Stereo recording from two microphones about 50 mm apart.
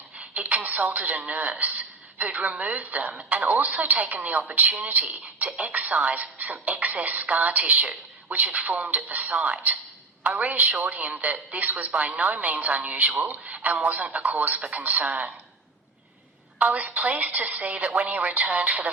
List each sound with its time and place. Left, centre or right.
0.2 s a woman's voice: right
16.6 s a woman's voice: right